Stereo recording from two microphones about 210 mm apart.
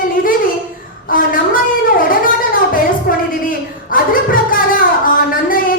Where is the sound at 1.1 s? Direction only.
40° left (ahead or behind).